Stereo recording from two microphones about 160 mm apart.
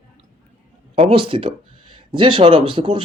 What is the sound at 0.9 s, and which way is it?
Speech, 35° right (ahead or behind).